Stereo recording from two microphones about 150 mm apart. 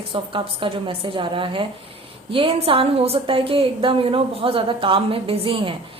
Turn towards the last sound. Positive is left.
turn(degrees=-35)  # may be behind; listen again after turning